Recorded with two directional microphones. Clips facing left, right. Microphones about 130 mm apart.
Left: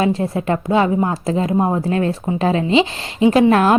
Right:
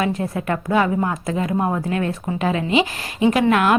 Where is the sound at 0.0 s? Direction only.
25° left (ahead or behind).